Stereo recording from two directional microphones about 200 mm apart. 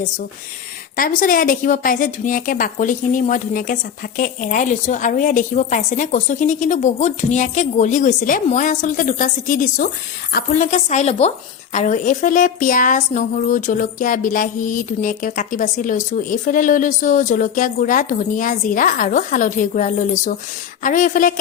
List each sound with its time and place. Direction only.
0.9 s a woman's voice: 45° left (ahead or behind)